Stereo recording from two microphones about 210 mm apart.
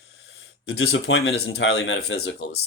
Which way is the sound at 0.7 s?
70° left (ahead or behind).